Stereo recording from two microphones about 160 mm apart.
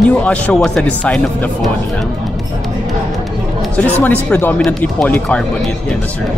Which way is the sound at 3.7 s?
10° left (ahead or behind).